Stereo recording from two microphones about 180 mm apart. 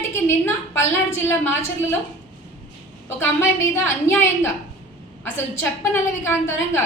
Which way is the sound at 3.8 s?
10° left (ahead or behind).